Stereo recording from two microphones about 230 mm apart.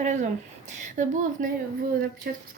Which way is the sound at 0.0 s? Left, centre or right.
Right.